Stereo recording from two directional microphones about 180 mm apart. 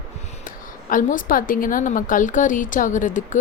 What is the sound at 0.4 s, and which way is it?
A woman's voice, 45° left (ahead or behind).